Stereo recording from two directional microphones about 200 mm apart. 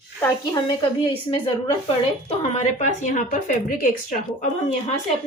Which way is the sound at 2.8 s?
40° left (ahead or behind).